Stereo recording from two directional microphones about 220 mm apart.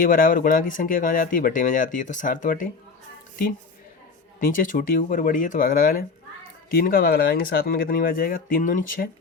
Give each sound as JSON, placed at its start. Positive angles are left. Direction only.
{"t": 0.0, "sound": "speech", "side_deg": 40}
{"t": 4.4, "sound": "speech", "side_deg": 40}